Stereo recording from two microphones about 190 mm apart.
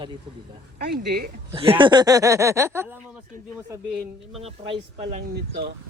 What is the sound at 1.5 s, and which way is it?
Speech, 30° right (ahead or behind).